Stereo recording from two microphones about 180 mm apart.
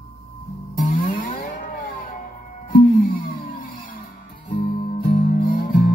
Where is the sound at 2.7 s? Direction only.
50° left (ahead or behind).